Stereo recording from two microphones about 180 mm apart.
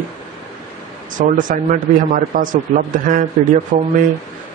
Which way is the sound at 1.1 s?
45° right (ahead or behind).